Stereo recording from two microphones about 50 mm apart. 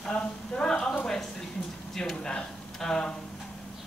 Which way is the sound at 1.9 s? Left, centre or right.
Centre.